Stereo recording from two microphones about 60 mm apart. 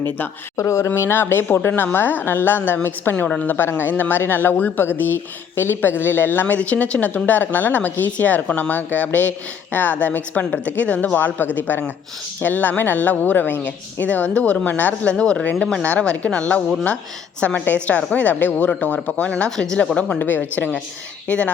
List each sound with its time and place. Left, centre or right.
0.5 s speech: left
0.9 s a woman's voice: left
6.6 s speech: left
15.1 s speech: centre
19.5 s speech: centre
20.1 s a woman's voice: left
21.2 s speech: left